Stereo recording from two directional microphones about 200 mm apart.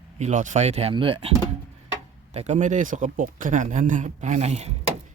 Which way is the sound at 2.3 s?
35° right (ahead or behind).